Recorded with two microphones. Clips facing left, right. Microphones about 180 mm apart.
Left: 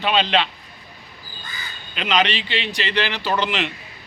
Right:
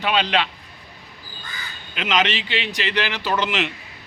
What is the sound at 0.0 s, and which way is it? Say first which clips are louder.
Speech: left 1 dB; 10° right (ahead or behind).